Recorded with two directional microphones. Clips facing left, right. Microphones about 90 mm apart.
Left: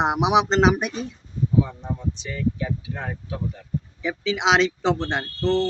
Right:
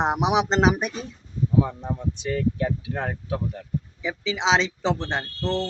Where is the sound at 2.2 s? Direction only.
45° right (ahead or behind).